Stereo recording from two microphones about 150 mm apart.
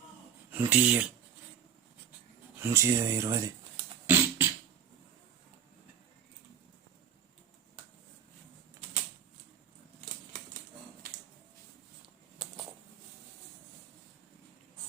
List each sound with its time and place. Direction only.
0.5 s speech: 10° right (ahead or behind)
2.6 s speech: 15° right (ahead or behind)
4.0 s beatboxing: 15° right (ahead or behind)